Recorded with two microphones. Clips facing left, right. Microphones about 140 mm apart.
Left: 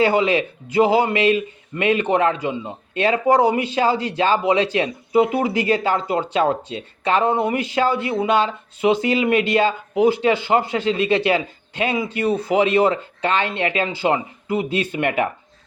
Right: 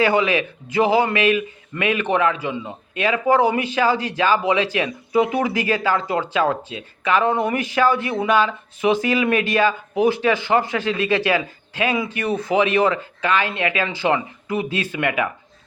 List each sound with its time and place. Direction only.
0.0 s a man's voice: 30° left (ahead or behind)